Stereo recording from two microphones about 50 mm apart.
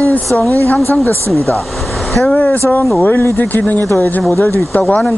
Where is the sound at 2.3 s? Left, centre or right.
Left.